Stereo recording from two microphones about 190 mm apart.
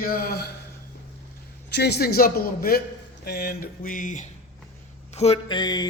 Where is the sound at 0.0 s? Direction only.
50° left (ahead or behind).